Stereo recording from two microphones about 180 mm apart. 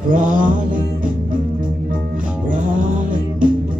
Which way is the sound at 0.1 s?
45° right (ahead or behind).